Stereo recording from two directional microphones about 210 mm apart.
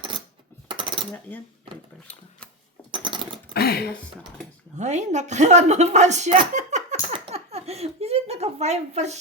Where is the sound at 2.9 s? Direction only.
25° right (ahead or behind).